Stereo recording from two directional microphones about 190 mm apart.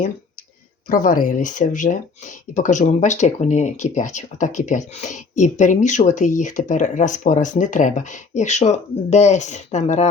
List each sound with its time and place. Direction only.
0.9 s speech: 45° left (ahead or behind)